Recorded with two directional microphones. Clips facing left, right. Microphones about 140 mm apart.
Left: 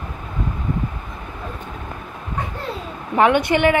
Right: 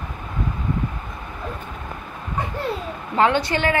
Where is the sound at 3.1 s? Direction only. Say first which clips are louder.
Left 3 dB; 15° left (ahead or behind).